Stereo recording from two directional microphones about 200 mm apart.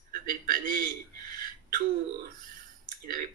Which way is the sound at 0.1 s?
45° right (ahead or behind).